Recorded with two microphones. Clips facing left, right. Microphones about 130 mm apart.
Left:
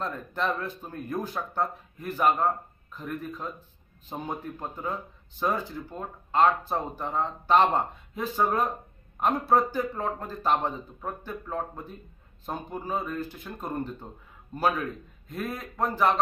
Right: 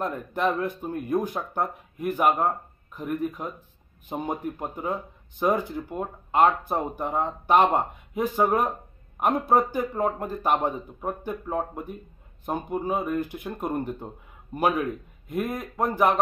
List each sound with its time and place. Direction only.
0.0 s a man's voice: 15° right (ahead or behind)